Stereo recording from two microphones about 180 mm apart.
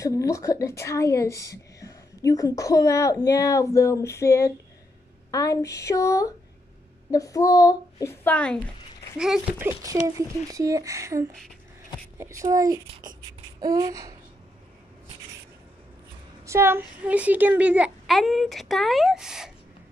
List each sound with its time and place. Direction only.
0.0 s a woman's voice: 20° left (ahead or behind)
9.2 s a child's voice: 5° right (ahead or behind)
9.7 s a child's voice: 20° right (ahead or behind)
13.6 s a sound: 20° right (ahead or behind)
16.4 s a child's voice: 15° right (ahead or behind)